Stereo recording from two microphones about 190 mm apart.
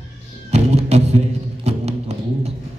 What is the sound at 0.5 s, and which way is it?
Music, 35° right (ahead or behind).